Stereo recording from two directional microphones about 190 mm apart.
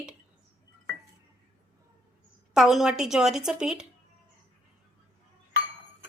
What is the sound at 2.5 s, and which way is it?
A woman's voice, 5° right (ahead or behind).